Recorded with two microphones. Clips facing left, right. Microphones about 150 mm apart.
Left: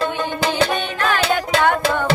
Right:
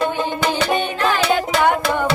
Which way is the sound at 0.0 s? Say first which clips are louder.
Right 1 dB; 15° right (ahead or behind).